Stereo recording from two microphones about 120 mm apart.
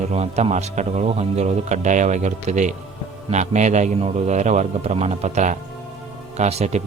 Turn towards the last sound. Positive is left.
turn(degrees=-65)  # may be behind; listen again after turning